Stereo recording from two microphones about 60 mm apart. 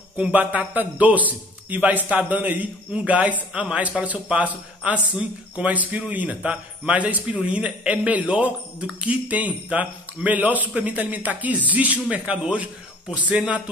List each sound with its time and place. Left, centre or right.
0.3 s speech: right